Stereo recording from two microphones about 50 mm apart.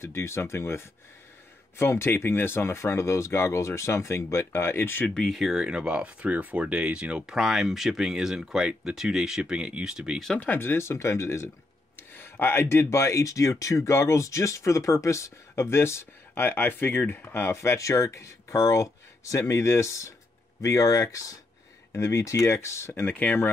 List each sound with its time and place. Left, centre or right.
0.0 s speech: left
5.0 s speech: centre
5.3 s speech: centre
5.7 s speech: centre
10.5 s speech: left
12.0 s speech: left
23.0 s speech: left